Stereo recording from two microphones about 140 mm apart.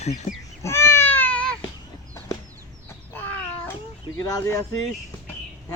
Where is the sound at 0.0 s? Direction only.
55° left (ahead or behind).